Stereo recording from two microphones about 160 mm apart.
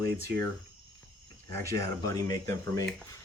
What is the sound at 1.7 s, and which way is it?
Speech, 20° left (ahead or behind).